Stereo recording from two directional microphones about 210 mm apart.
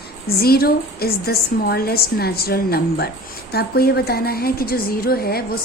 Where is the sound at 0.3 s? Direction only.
45° left (ahead or behind).